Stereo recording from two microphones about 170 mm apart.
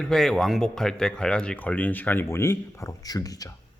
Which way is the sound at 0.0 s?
5° left (ahead or behind).